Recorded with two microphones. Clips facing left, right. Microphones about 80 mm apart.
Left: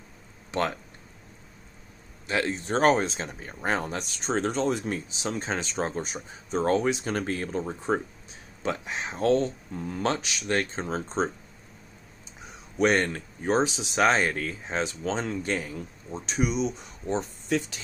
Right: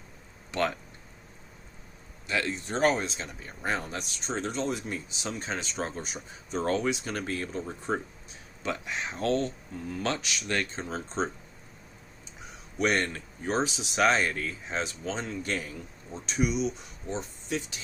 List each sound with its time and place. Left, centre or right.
2.2 s speech: left
5.4 s speech: left
12.8 s speech: left
17.1 s speech: left